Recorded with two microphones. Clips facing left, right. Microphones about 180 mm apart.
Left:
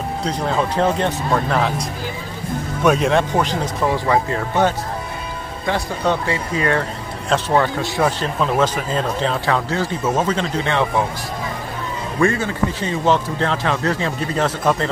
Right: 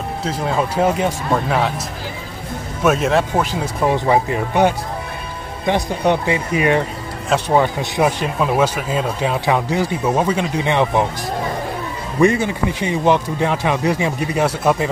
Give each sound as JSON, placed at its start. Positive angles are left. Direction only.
{"t": 0.2, "sound": "speech", "side_deg": -5}
{"t": 3.9, "sound": "speech", "side_deg": -20}
{"t": 12.2, "sound": "speech", "side_deg": -15}